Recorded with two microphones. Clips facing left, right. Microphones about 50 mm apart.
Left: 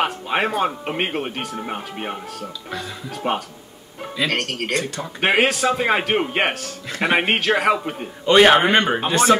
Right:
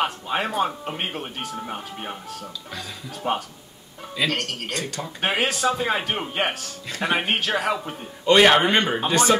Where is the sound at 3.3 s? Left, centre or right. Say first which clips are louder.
Left 2 dB; left.